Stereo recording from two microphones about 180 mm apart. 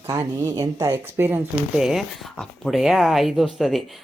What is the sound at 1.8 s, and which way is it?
Speech, centre (ahead or behind).